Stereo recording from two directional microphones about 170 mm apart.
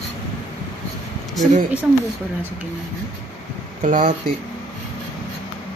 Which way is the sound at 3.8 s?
50° right (ahead or behind).